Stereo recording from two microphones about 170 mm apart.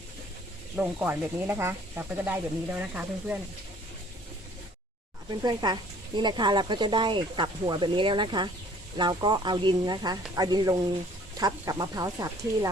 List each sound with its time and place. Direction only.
0.8 s speech: 15° right (ahead or behind)
5.3 s speech: 25° right (ahead or behind)